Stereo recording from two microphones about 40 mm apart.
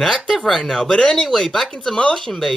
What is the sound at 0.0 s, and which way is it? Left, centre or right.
Speech, centre.